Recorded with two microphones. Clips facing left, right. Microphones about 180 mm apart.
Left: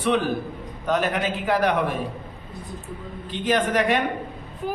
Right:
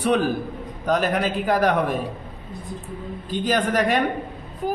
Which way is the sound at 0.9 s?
40° right (ahead or behind).